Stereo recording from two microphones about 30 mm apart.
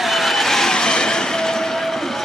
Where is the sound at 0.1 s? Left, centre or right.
Centre.